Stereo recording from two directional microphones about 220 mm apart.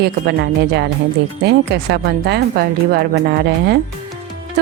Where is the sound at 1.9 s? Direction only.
50° right (ahead or behind).